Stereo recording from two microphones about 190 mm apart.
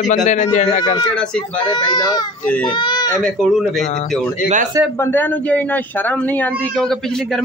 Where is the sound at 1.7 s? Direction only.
20° left (ahead or behind).